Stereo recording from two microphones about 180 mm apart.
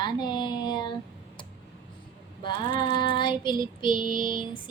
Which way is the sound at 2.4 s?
25° left (ahead or behind).